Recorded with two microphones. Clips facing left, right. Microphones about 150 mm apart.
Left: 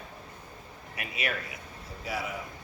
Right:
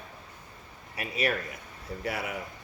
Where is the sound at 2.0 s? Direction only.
60° right (ahead or behind).